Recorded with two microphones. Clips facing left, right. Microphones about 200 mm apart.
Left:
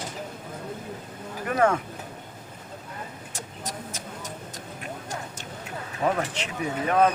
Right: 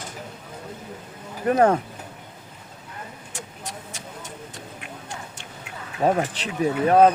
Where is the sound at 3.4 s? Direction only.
40° left (ahead or behind).